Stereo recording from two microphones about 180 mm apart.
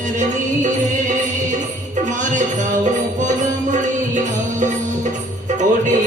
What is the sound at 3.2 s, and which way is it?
Music, 45° right (ahead or behind).